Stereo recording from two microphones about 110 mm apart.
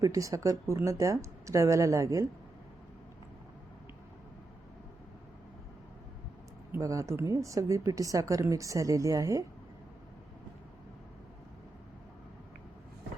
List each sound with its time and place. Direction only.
0.0 s a woman's voice: 30° right (ahead or behind)
6.7 s a woman's voice: 30° right (ahead or behind)